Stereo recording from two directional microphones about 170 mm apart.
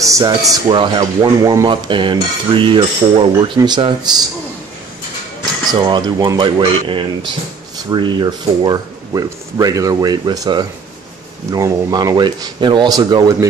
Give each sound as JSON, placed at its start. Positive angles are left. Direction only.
{"t": 0.0, "sound": "speech", "side_deg": -20}
{"t": 5.7, "sound": "speech", "side_deg": -25}